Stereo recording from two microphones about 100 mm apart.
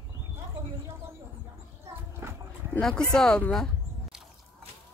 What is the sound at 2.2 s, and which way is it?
Dog, 25° right (ahead or behind).